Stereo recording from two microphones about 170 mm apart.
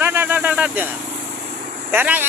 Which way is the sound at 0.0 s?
10° right (ahead or behind).